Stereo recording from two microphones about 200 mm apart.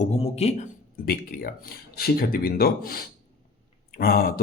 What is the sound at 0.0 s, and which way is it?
Speech, 30° left (ahead or behind).